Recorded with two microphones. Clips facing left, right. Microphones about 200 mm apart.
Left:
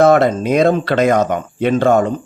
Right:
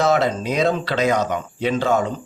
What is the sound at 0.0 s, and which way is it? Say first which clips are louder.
Speech: left 7 dB; 55° left (ahead or behind).